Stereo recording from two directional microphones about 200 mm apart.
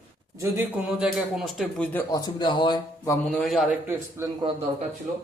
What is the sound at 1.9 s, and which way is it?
Speech, 20° left (ahead or behind).